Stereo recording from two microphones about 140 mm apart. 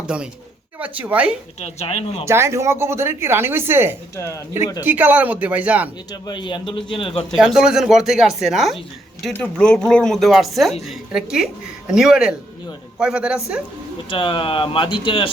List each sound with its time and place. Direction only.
0.8 s a woman's voice: 10° right (ahead or behind)
1.5 s speech: 50° left (ahead or behind)
2.2 s a woman's voice: 20° right (ahead or behind)
4.1 s speech: 20° left (ahead or behind)
4.8 s a woman's voice: 15° right (ahead or behind)
6.1 s a man's voice: 30° left (ahead or behind)
7.3 s a woman's voice: 5° right (ahead or behind)
14.1 s a man's voice: 35° left (ahead or behind)